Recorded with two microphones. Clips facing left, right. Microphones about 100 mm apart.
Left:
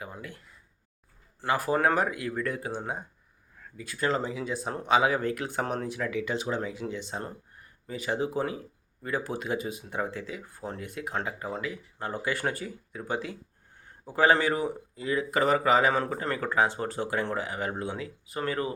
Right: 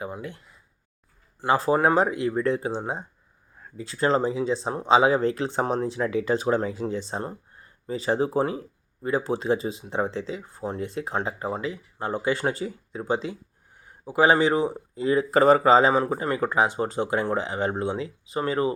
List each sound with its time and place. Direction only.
0.0 s a sound: 25° right (ahead or behind)
1.4 s speech: 25° right (ahead or behind)
13.8 s speech: 10° right (ahead or behind)